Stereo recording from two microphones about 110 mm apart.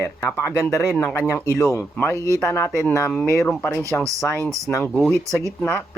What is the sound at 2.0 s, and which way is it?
Speech, 20° left (ahead or behind).